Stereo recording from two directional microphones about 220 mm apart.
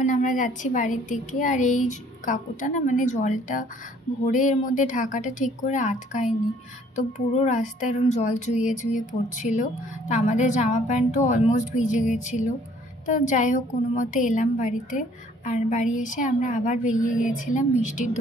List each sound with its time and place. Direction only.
0.0 s speech: 35° left (ahead or behind)